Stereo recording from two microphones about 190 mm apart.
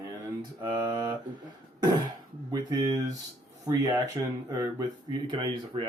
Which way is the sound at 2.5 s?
20° right (ahead or behind).